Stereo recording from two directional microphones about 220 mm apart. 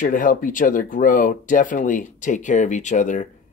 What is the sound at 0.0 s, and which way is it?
Speech, 35° left (ahead or behind).